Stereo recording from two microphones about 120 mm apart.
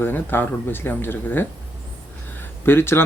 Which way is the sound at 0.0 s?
15° left (ahead or behind).